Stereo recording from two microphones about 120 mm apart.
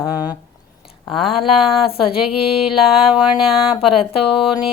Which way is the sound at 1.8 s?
50° left (ahead or behind).